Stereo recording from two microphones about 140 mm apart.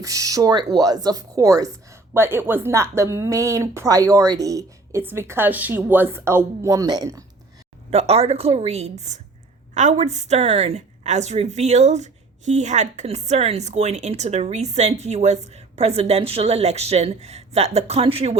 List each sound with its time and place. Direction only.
0.0 s speech: 25° right (ahead or behind)
7.9 s a woman's voice: 45° right (ahead or behind)